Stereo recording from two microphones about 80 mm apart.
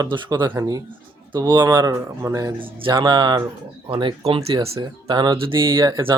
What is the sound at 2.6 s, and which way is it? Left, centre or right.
Speech, right.